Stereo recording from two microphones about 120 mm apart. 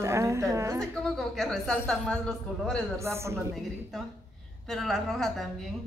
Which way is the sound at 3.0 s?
25° right (ahead or behind).